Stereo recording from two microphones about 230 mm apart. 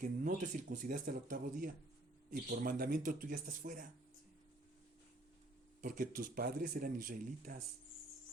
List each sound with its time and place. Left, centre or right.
0.0 s speech: right
5.8 s speech: right